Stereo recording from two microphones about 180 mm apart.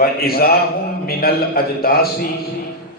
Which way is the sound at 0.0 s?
60° left (ahead or behind).